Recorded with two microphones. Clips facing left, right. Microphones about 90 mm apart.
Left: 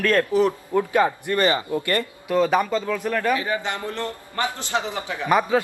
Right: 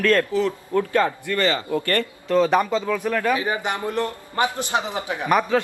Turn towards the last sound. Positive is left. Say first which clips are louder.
# even
turn(degrees=10)  # may be behind; listen again after turning